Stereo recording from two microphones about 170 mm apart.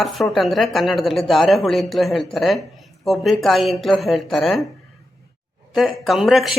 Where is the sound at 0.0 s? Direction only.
Centre (ahead or behind).